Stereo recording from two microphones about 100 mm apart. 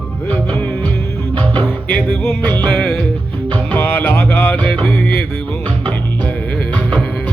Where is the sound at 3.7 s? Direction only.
20° left (ahead or behind).